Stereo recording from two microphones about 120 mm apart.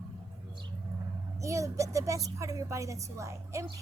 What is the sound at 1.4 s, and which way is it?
A woman's voice, 25° right (ahead or behind).